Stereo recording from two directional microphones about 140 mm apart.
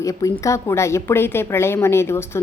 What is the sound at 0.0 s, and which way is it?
A woman's voice, 20° left (ahead or behind).